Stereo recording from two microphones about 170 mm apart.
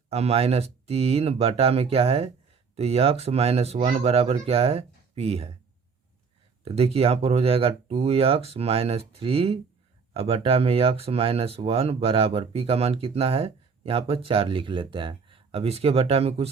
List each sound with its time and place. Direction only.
0.1 s speech: 40° right (ahead or behind)
6.7 s speech: 35° right (ahead or behind)